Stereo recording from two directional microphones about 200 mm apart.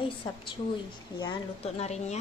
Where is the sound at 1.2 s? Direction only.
25° left (ahead or behind).